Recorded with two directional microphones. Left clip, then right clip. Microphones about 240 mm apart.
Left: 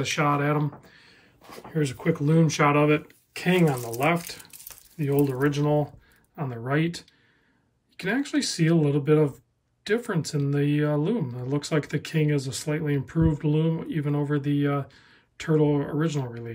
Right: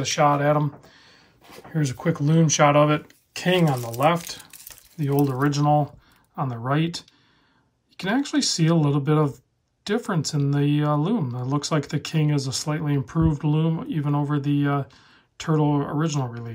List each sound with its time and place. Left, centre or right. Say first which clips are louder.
0.0 s speech: right 5 dB; centre
1.8 s speech: even; right
2.9 s speech: left 1 dB; centre